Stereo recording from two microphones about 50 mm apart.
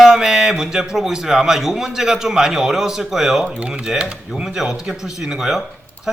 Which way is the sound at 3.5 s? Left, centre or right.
Right.